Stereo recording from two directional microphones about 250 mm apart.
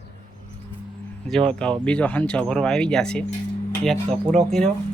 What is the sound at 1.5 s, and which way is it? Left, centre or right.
Speech, centre.